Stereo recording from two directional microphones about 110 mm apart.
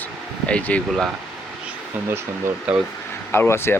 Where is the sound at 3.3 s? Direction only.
20° left (ahead or behind).